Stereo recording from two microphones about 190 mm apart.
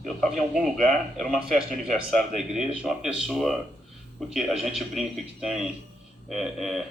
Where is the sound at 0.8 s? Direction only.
Centre (ahead or behind).